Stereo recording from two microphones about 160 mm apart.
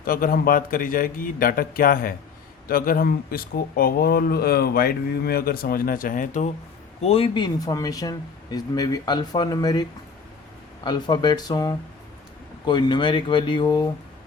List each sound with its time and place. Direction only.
0.0 s a man's voice: 65° left (ahead or behind)
7.0 s speech: 40° left (ahead or behind)
10.8 s speech: 25° left (ahead or behind)